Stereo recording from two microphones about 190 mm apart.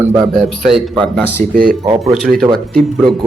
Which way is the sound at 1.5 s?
50° right (ahead or behind).